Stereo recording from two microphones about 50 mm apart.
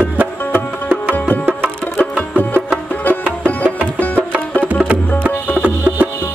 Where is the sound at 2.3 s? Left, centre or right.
Left.